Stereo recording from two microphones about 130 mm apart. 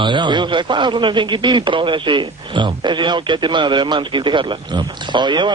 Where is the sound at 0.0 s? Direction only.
35° right (ahead or behind).